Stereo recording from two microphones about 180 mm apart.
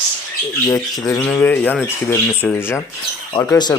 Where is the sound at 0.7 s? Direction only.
20° left (ahead or behind).